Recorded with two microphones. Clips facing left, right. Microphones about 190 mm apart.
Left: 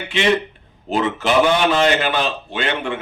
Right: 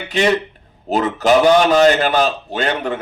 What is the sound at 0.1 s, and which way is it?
A man's voice, 40° right (ahead or behind).